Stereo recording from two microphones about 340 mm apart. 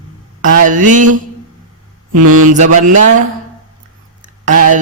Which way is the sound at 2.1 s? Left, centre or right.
Right.